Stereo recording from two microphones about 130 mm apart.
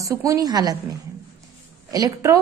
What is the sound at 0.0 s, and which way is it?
Speech, 25° right (ahead or behind).